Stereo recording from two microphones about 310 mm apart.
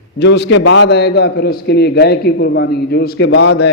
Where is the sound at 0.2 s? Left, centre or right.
Left.